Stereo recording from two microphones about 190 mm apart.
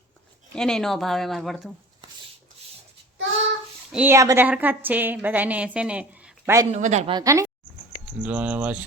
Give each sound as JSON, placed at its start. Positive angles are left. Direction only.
{"t": 0.5, "sound": "speech", "side_deg": 5}
{"t": 3.9, "sound": "a woman's voice", "side_deg": -10}
{"t": 6.7, "sound": "speech", "side_deg": -40}
{"t": 7.1, "sound": "a woman's voice", "side_deg": -20}